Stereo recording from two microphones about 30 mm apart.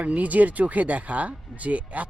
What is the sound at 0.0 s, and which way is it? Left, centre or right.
Speech, right.